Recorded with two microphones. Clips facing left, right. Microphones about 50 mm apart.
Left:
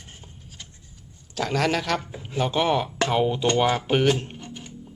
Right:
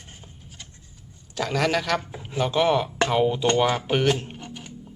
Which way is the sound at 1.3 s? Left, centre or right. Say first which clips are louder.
Even; centre.